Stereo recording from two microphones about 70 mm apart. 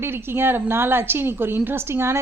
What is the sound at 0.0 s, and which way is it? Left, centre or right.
Speech, right.